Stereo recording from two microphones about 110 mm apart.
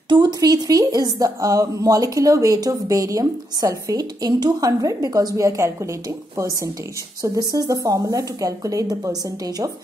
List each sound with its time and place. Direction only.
0.1 s speech: 40° right (ahead or behind)